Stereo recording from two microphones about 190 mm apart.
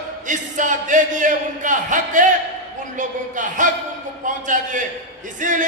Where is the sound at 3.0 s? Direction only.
40° right (ahead or behind).